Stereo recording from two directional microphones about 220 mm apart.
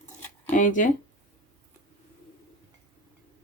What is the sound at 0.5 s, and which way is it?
Speech, 35° left (ahead or behind).